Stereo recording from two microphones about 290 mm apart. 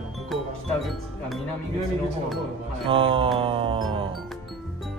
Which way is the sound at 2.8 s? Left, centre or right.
Centre.